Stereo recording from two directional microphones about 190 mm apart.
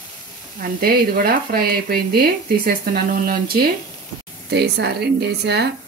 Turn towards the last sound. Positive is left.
turn(degrees=-60)  # may be behind; listen again after turning